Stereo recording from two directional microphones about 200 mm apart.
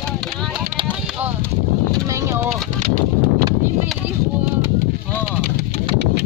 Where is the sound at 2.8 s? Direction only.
40° right (ahead or behind).